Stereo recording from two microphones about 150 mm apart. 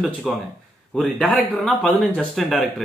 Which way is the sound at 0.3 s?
Centre (ahead or behind).